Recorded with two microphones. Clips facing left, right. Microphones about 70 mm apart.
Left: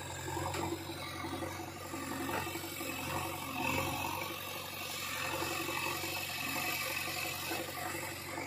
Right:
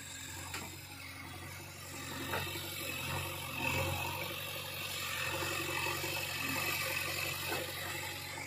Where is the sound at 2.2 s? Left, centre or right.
Centre.